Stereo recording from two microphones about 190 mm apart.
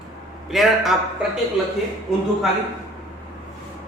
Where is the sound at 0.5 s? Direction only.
Centre (ahead or behind).